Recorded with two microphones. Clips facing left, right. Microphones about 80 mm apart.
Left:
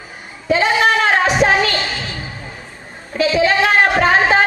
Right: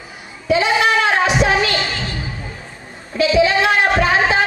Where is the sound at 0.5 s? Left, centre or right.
Left.